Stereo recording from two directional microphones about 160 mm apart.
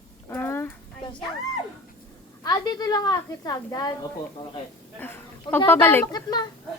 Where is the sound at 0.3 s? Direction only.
15° left (ahead or behind).